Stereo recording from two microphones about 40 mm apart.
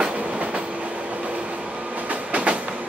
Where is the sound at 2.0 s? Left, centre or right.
Right.